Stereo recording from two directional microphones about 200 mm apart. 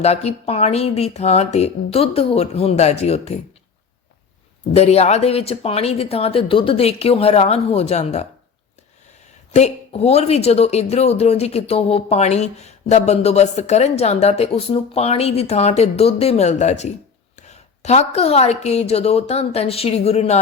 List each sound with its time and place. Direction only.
0.0 s speech: 30° left (ahead or behind)
4.7 s speech: 30° left (ahead or behind)
9.5 s speech: 35° left (ahead or behind)